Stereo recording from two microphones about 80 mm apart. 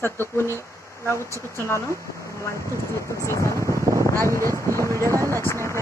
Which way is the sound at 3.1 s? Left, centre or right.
Left.